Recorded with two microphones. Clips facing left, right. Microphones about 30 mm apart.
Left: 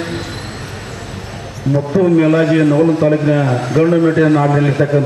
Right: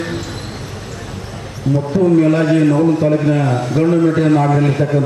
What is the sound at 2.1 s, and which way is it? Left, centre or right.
A man's voice, left.